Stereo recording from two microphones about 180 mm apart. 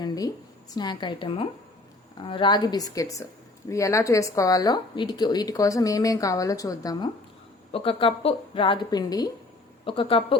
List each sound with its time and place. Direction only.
0.0 s a sound: 20° left (ahead or behind)
0.7 s a woman's voice: 25° left (ahead or behind)
7.7 s a woman's voice: 30° left (ahead or behind)